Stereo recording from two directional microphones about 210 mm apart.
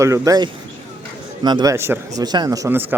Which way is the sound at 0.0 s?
15° right (ahead or behind).